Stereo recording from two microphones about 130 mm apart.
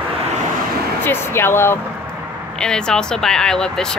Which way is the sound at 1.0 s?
20° left (ahead or behind).